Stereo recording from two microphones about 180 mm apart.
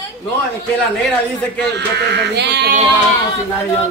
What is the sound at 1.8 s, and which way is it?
Speech, 70° right (ahead or behind).